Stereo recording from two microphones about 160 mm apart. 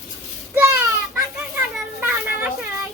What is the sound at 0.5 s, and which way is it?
Children playing, 20° right (ahead or behind).